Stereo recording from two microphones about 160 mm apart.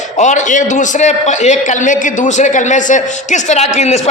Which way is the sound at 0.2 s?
50° left (ahead or behind).